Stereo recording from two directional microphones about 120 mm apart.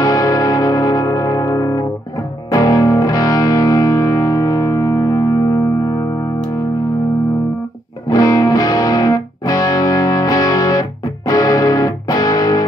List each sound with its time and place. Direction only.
0.0 s music: 30° left (ahead or behind)
8.1 s music: 30° left (ahead or behind)